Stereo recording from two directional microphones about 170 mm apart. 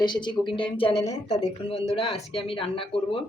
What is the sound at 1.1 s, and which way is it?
Speech, 45° left (ahead or behind).